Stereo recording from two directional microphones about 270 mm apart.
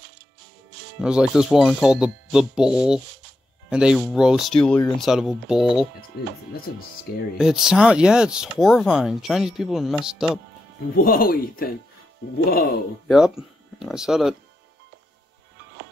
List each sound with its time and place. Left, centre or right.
1.0 s speech: centre
6.5 s speech: left
7.3 s speech: centre
11.0 s speech: left
13.1 s speech: centre